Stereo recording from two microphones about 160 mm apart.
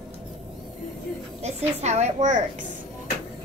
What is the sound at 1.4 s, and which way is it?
A woman's voice, 45° right (ahead or behind).